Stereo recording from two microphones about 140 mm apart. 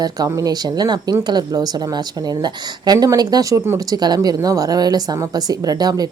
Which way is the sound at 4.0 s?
30° right (ahead or behind).